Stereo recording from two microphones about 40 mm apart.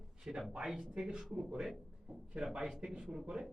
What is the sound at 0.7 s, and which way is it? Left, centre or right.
Speech, centre.